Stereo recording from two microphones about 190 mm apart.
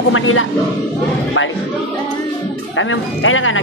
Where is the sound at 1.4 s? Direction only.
80° left.